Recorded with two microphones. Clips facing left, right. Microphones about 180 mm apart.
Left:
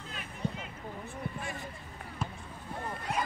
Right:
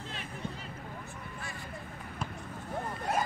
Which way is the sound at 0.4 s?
35° left (ahead or behind).